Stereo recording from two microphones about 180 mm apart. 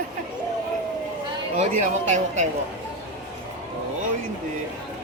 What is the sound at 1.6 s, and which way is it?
Speech, 40° right (ahead or behind).